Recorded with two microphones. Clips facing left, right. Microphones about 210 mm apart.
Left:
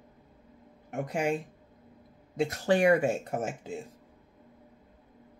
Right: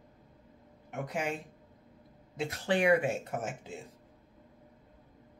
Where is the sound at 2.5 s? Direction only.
45° left (ahead or behind).